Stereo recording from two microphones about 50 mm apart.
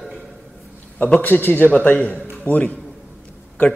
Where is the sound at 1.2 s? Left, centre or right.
Left.